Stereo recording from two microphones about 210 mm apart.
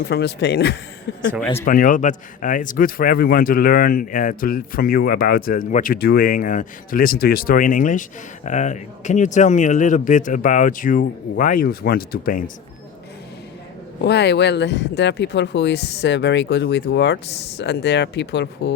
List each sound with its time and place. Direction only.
0.1 s a man's voice: 50° left (ahead or behind)
1.6 s a man's voice: 40° left (ahead or behind)
14.0 s speech: 55° left (ahead or behind)